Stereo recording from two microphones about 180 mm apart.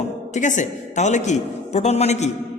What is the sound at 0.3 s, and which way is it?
A man's voice, 45° left (ahead or behind).